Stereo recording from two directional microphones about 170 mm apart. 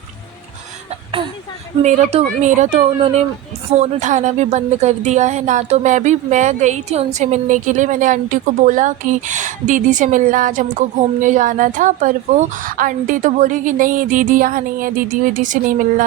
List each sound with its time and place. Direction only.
1.8 s speech: 45° right (ahead or behind)